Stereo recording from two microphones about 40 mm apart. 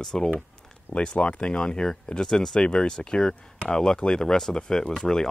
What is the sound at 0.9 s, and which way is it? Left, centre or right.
Speech, left.